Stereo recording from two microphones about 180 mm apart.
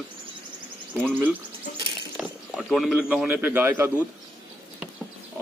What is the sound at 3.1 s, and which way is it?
Speech, 5° right (ahead or behind).